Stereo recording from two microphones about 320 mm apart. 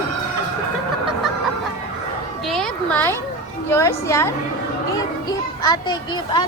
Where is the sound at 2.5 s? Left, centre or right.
Centre.